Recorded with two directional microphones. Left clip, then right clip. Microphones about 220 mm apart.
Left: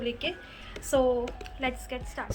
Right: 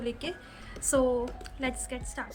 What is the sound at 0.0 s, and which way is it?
A woman's voice, 10° right (ahead or behind).